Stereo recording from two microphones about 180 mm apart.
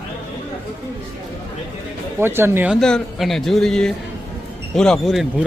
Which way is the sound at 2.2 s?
10° right (ahead or behind).